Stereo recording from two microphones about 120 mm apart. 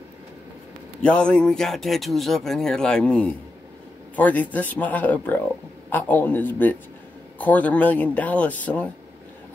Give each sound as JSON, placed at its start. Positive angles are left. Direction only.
{"t": 1.0, "sound": "speech", "side_deg": 10}